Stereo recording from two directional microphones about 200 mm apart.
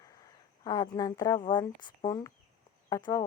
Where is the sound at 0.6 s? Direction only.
20° left (ahead or behind).